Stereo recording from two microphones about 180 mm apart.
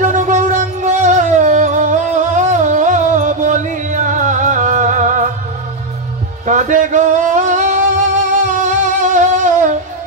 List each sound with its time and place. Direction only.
0.0 s music: 45° right (ahead or behind)
6.4 s a sound: 45° right (ahead or behind)
8.3 s music: 45° right (ahead or behind)